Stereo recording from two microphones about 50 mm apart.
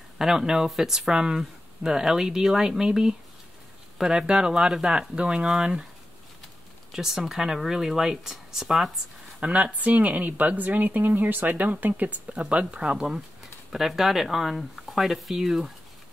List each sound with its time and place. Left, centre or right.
0.2 s speech: centre
6.9 s speech: centre
9.4 s speech: right
13.0 s speech: centre